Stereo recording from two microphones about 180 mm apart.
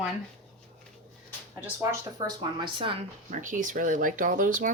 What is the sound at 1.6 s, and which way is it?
Speech, 15° right (ahead or behind).